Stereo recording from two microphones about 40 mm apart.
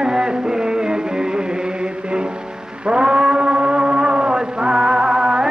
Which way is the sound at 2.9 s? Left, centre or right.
Right.